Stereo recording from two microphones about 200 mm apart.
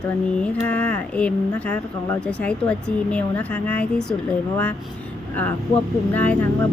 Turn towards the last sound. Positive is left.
turn(degrees=10)  # may be behind; listen again after turning